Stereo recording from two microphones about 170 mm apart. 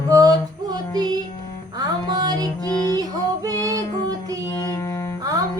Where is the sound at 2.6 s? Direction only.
25° left (ahead or behind).